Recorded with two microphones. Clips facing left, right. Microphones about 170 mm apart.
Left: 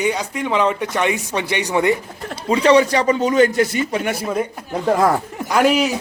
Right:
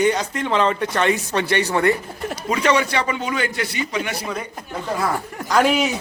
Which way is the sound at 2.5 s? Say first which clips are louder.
Left 6 dB; 35° left (ahead or behind).